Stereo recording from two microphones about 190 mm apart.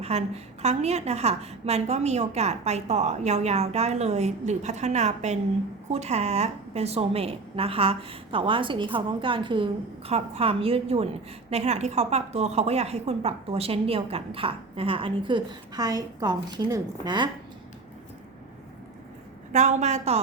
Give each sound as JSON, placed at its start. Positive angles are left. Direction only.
{"t": 0.0, "sound": "a woman's voice", "side_deg": -35}
{"t": 19.5, "sound": "a woman's voice", "side_deg": -35}